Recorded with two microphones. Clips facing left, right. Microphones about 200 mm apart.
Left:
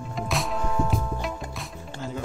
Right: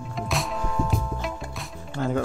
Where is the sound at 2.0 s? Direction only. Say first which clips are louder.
Right 9 dB; 60° right (ahead or behind).